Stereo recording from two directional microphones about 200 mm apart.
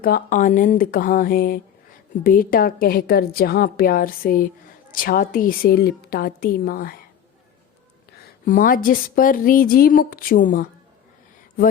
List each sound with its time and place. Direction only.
0.0 s a woman's voice: 45° left (ahead or behind)
8.4 s a woman's voice: 45° left (ahead or behind)